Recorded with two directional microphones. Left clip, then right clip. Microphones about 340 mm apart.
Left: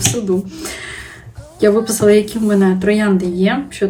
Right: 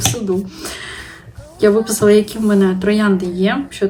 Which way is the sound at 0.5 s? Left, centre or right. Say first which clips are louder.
Left 1 dB; centre.